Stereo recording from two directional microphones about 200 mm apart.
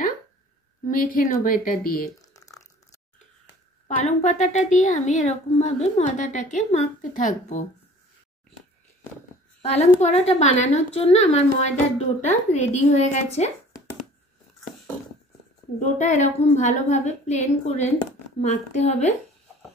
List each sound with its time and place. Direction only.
0.8 s a woman's voice: 40° left (ahead or behind)
2.3 s a sound: 15° left (ahead or behind)
3.8 s a woman's voice: 35° left (ahead or behind)
9.6 s a woman's voice: 35° left (ahead or behind)
15.8 s a woman's voice: 35° left (ahead or behind)